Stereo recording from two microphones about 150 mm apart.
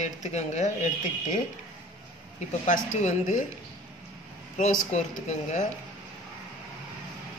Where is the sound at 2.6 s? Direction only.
55° left (ahead or behind).